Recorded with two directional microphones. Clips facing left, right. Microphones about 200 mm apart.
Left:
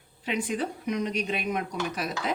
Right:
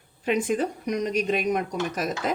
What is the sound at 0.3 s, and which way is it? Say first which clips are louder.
A woman's voice: right 5 dB; 45° right (ahead or behind).